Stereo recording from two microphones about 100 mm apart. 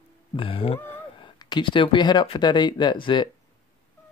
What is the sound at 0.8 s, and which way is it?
Speech, 55° left (ahead or behind).